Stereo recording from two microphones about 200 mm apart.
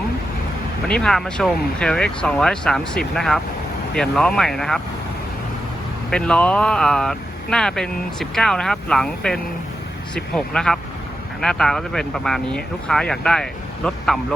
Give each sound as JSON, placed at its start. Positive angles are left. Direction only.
{"t": 0.9, "sound": "speech", "side_deg": 5}
{"t": 6.1, "sound": "speech", "side_deg": 5}